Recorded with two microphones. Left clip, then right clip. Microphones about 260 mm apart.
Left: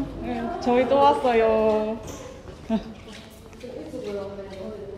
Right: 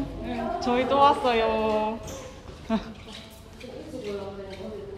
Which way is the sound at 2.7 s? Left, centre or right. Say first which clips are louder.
Left 1 dB; centre.